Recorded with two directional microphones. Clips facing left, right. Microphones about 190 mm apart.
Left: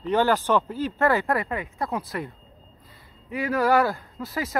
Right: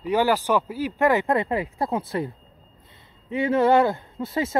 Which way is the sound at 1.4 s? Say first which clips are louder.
Right 4 dB; 30° right (ahead or behind).